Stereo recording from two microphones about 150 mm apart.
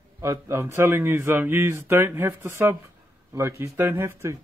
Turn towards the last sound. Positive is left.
turn(degrees=-15)  # may be behind; listen again after turning